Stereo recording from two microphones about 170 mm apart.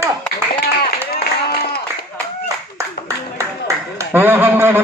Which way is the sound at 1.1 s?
65° left (ahead or behind).